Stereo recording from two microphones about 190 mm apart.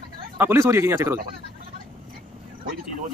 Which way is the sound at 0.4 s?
15° right (ahead or behind).